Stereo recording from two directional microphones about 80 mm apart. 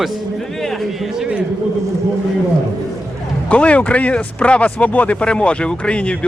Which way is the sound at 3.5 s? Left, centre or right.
Centre.